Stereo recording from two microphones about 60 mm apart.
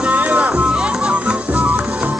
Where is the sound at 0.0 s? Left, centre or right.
Right.